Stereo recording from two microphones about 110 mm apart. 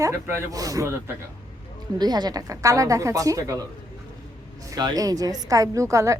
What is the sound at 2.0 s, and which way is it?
A woman's voice, 40° right (ahead or behind).